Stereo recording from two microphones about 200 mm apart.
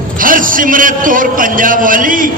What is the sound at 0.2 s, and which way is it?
A man's voice, 45° right (ahead or behind).